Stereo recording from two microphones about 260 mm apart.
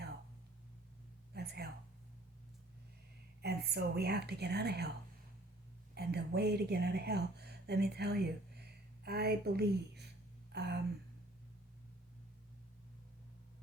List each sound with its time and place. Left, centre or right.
1.3 s speech: right
3.4 s a woman's voice: right
5.9 s speech: right
10.5 s a sound: right